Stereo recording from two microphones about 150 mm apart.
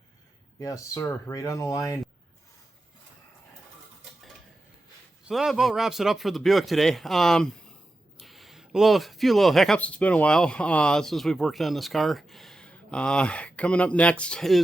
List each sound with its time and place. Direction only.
0.6 s speech: 20° left (ahead or behind)
5.2 s speech: centre (ahead or behind)